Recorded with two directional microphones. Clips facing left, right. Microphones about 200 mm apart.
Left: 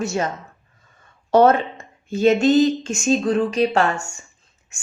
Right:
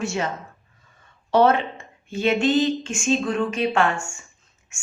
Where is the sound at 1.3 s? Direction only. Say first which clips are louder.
Left 3 dB; 45° left (ahead or behind).